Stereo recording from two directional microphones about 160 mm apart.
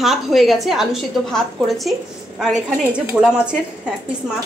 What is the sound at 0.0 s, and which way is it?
A woman's voice, centre (ahead or behind).